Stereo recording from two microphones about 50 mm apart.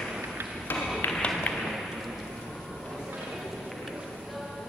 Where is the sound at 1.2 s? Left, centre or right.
Left.